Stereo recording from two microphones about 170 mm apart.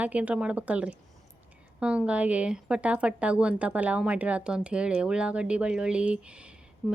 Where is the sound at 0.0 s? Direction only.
10° right (ahead or behind).